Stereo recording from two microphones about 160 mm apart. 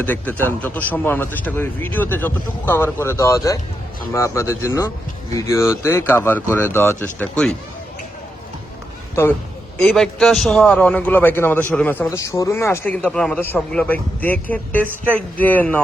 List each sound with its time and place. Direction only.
0.0 s a man's voice: 10° left (ahead or behind)
9.7 s a man's voice: 5° left (ahead or behind)